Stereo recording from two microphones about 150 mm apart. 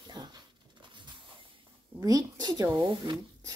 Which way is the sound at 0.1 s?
30° right (ahead or behind).